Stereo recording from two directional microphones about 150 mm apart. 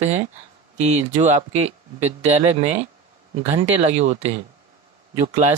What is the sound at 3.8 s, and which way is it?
Speech, 50° right (ahead or behind).